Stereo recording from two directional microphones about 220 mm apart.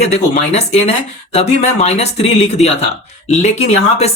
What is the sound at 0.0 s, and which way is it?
Speech, 30° left (ahead or behind).